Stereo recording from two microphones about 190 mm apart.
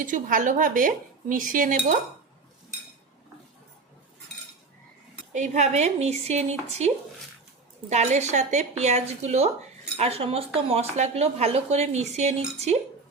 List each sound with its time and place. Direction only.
0.0 s speech: 45° right (ahead or behind)
5.3 s speech: 40° right (ahead or behind)